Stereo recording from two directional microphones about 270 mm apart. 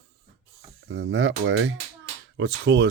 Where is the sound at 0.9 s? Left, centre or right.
Right.